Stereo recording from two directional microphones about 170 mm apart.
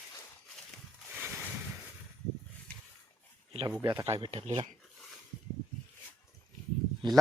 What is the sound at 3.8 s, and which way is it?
Speech, 20° right (ahead or behind).